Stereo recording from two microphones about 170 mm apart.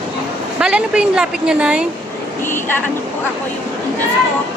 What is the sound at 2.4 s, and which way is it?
Speech, 15° left (ahead or behind).